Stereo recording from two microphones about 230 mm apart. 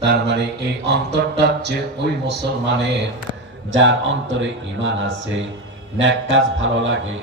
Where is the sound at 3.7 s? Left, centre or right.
Right.